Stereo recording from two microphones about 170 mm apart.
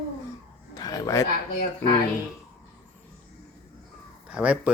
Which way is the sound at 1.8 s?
15° left (ahead or behind).